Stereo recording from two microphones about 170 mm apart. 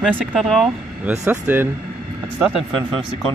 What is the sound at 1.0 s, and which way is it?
Speech, 10° right (ahead or behind).